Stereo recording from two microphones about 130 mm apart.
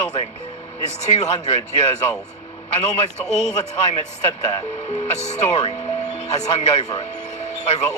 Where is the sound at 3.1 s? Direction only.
60° left (ahead or behind).